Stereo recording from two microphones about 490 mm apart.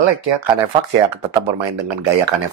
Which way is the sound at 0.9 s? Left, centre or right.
Right.